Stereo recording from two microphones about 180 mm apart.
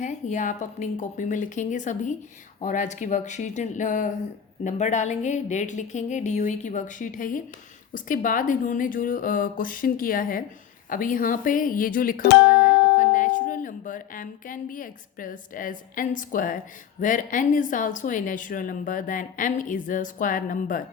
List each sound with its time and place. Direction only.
0.0 s a woman's voice: 45° left (ahead or behind)